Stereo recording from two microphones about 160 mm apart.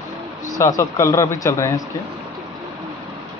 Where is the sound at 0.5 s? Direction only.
20° left (ahead or behind).